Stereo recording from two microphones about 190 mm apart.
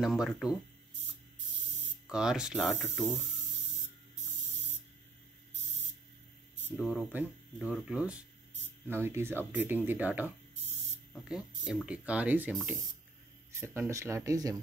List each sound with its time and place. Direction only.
0.0 s speech: 5° right (ahead or behind)
2.0 s speech: 5° right (ahead or behind)
6.8 s speech: 10° right (ahead or behind)
13.6 s speech: 15° right (ahead or behind)